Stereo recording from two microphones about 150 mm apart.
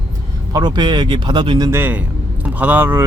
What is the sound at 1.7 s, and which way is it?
Speech, 15° right (ahead or behind).